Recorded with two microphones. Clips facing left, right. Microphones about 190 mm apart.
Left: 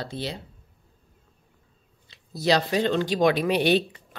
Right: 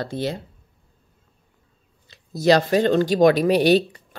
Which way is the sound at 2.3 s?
45° right (ahead or behind).